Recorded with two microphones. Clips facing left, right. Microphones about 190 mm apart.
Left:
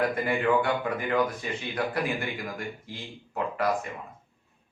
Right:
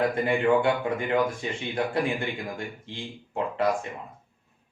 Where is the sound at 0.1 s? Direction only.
25° right (ahead or behind).